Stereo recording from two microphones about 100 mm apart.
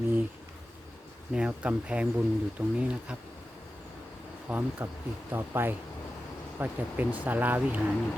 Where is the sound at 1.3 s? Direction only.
10° right (ahead or behind).